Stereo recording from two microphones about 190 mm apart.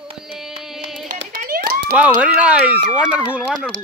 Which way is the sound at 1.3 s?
50° right (ahead or behind).